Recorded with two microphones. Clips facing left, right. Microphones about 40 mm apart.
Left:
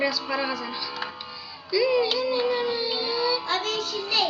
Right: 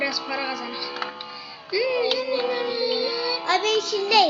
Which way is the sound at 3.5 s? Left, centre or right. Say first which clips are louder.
Right 5 dB; right.